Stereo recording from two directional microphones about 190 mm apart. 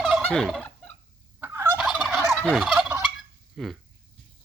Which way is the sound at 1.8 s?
Centre (ahead or behind).